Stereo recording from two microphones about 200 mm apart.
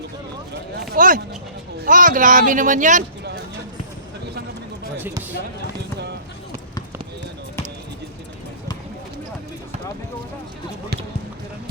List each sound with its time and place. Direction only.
0.8 s speech: 45° right (ahead or behind)
4.9 s basketball bounce: 10° right (ahead or behind)